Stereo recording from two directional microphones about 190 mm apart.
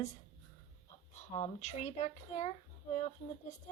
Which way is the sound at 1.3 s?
35° left (ahead or behind).